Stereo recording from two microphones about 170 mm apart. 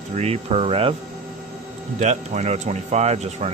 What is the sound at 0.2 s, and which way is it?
Speech, 40° right (ahead or behind).